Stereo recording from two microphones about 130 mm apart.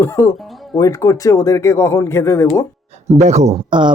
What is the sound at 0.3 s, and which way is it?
Speech, centre (ahead or behind).